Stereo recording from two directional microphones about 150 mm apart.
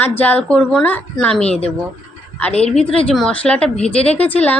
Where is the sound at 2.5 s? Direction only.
45° left (ahead or behind).